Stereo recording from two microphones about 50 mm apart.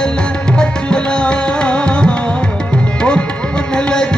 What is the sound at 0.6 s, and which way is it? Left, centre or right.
Music, centre.